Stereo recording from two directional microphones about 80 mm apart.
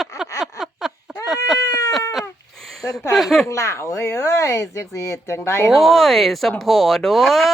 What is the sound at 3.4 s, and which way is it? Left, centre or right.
Speech, left.